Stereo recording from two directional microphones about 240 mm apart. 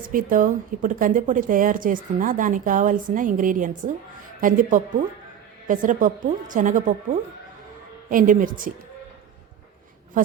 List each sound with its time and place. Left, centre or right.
0.0 s a woman's voice: right
10.2 s a woman's voice: right